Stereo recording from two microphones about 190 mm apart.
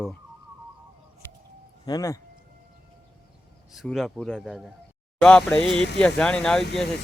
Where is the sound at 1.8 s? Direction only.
20° left (ahead or behind).